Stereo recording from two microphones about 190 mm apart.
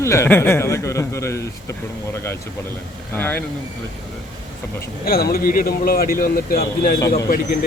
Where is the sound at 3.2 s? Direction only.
10° left (ahead or behind).